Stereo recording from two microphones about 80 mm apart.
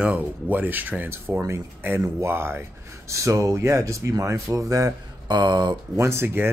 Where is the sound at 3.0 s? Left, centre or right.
Right.